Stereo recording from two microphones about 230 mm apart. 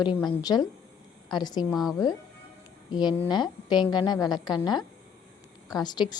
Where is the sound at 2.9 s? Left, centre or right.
Centre.